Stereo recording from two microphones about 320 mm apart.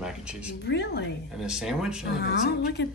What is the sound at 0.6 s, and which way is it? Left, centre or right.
Speech, left.